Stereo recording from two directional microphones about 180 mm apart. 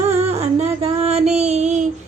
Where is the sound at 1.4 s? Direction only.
40° right (ahead or behind).